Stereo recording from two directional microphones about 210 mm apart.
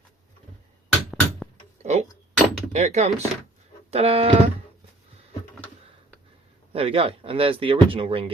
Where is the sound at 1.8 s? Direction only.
30° right (ahead or behind).